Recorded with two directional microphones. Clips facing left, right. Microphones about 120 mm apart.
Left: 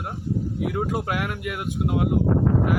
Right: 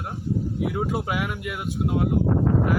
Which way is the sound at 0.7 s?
Centre (ahead or behind).